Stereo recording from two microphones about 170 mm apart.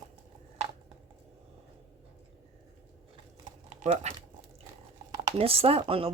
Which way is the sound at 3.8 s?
40° right (ahead or behind).